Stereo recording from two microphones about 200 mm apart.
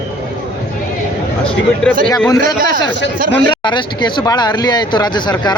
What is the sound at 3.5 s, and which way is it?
Speech, 20° left (ahead or behind).